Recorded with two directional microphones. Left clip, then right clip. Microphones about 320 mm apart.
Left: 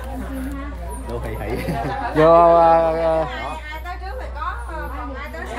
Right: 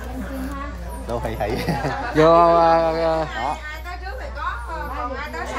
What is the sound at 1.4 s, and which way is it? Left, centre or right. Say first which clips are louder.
Speech: right 2 dB; right.